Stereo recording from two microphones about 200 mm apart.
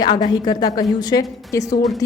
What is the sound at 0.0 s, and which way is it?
Speech, 20° left (ahead or behind).